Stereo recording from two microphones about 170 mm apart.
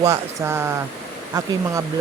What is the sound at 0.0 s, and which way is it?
Speech, 15° right (ahead or behind).